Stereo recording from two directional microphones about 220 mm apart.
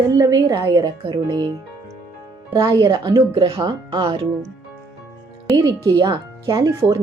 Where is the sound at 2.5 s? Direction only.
20° right (ahead or behind).